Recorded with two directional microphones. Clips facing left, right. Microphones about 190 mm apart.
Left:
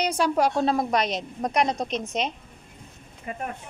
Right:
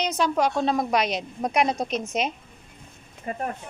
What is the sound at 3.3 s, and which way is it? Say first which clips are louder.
Speech: right 3 dB; 40° right (ahead or behind).